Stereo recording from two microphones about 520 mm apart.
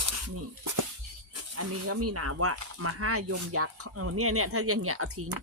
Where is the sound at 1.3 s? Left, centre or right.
Right.